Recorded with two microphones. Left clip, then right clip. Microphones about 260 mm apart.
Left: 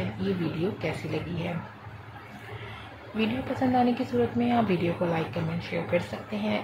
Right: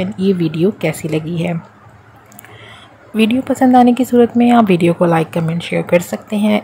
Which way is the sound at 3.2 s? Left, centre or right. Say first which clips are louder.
Right 15 dB; right.